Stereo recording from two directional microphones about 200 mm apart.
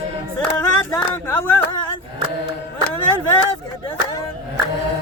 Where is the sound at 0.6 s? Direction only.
15° left (ahead or behind).